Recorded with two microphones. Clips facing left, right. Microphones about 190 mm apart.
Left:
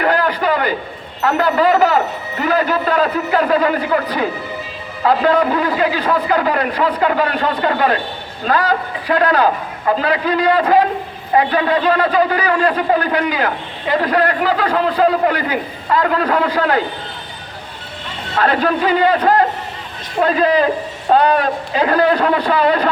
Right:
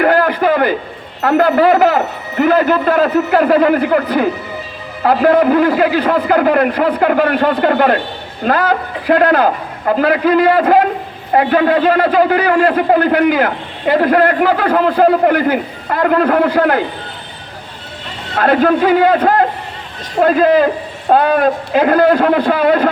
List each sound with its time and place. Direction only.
0.0 s a sound: 55° right (ahead or behind)
1.2 s a man's voice: 55° right (ahead or behind)
18.3 s a man's voice: 50° right (ahead or behind)